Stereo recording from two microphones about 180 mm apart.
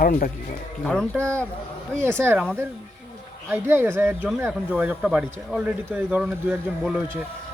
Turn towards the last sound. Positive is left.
turn(degrees=-5)  # may be behind; listen again after turning